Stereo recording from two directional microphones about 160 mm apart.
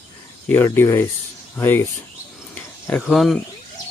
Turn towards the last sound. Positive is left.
turn(degrees=0)  # may be behind; listen again after turning